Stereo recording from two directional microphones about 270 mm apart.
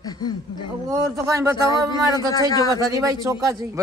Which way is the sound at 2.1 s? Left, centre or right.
Centre.